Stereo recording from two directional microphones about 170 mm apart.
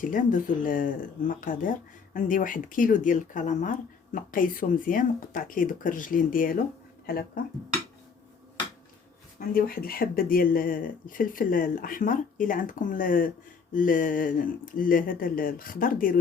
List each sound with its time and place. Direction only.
0.0 s speech: 50° left (ahead or behind)
9.4 s speech: 60° left (ahead or behind)